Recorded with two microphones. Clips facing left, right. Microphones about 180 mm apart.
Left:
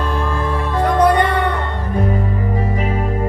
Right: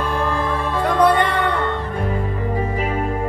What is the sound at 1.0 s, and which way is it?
Music, 45° left (ahead or behind).